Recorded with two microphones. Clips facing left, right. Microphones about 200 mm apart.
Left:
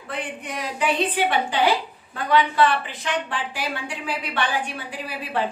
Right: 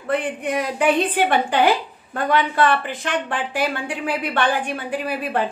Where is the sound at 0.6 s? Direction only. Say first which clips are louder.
Right 4 dB; 55° right (ahead or behind).